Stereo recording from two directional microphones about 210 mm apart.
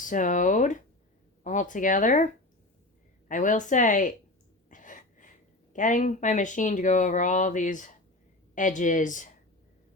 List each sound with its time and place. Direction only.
0.0 s speech: 40° left (ahead or behind)
4.7 s a sound: 40° left (ahead or behind)
5.7 s speech: 35° left (ahead or behind)